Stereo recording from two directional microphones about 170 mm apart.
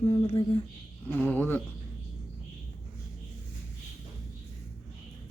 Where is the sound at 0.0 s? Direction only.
40° left (ahead or behind).